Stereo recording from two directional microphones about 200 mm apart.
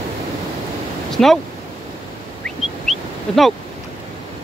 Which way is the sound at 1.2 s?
5° left (ahead or behind).